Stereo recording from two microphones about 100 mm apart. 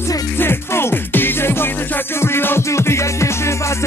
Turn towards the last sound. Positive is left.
turn(degrees=30)  # may be behind; listen again after turning